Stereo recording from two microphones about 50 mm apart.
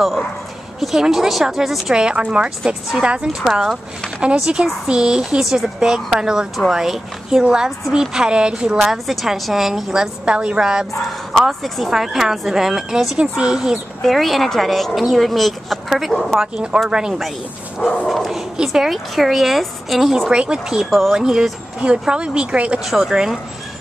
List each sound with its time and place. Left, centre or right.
0.7 s speech: centre
2.0 s speech: centre
8.7 s a woman's voice: centre
10.2 s speech: centre
11.4 s speech: centre
14.0 s a woman's voice: centre
18.0 s a woman's voice: centre
21.7 s speech: right
22.8 s speech: centre